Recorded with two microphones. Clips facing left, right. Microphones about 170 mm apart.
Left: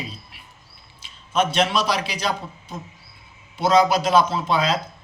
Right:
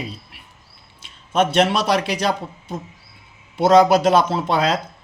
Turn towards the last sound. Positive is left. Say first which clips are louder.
# right 2 dB
turn(degrees=-65)  # may be behind; listen again after turning